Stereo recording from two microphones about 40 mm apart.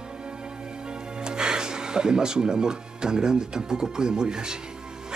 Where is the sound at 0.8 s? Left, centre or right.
Right.